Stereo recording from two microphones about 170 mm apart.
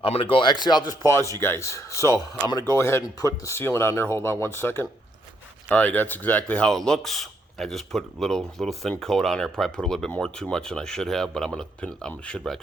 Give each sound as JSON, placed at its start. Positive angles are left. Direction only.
{"t": 0.0, "sound": "a man's voice", "side_deg": 35}